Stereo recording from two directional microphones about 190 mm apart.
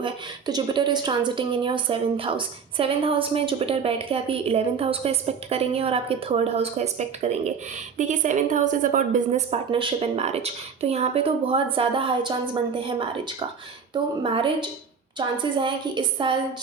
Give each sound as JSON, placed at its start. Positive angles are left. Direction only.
{"t": 0.0, "sound": "a woman's voice", "side_deg": -25}